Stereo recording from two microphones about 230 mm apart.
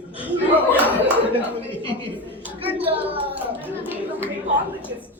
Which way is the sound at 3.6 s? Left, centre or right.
Centre.